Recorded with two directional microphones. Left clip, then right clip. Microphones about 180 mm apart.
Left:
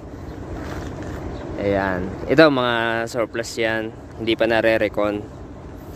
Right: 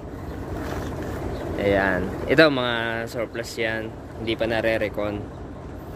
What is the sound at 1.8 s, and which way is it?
Speech, 15° left (ahead or behind).